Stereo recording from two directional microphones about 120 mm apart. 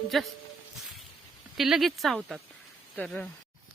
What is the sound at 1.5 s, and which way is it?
Speech, 5° right (ahead or behind).